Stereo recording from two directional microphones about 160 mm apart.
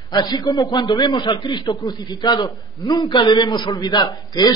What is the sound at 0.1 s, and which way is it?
A man's voice, 25° left (ahead or behind).